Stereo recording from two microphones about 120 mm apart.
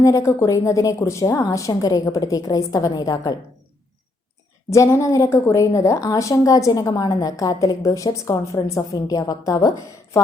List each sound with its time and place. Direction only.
0.0 s a woman's voice: 25° left (ahead or behind)
4.7 s a woman's voice: 25° left (ahead or behind)